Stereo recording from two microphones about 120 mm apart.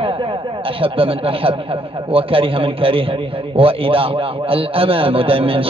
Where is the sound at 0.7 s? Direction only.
50° right (ahead or behind).